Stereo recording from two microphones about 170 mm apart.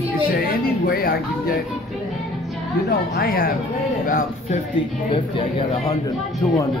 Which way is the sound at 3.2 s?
60° left (ahead or behind).